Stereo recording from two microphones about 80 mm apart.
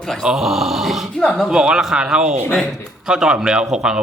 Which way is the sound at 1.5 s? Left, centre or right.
Centre.